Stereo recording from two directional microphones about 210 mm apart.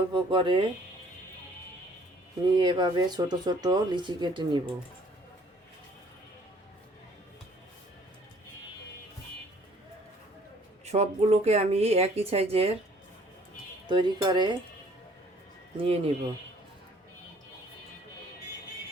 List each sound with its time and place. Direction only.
0.1 s speech: 25° right (ahead or behind)
2.6 s speech: 20° right (ahead or behind)
10.8 s speech: 30° right (ahead or behind)
13.8 s speech: 20° right (ahead or behind)
15.8 s speech: 30° right (ahead or behind)